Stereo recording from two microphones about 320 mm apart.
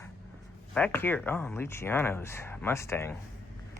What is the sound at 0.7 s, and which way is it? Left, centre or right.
Speech, centre.